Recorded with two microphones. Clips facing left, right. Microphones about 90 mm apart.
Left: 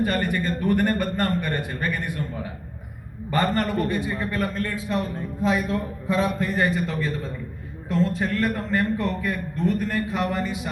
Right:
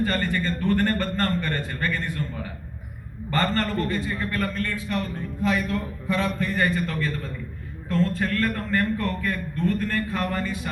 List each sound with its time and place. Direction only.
0.0 s a man's voice: 15° left (ahead or behind)